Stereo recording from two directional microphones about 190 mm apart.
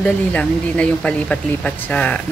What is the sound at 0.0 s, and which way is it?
Speech, 5° left (ahead or behind).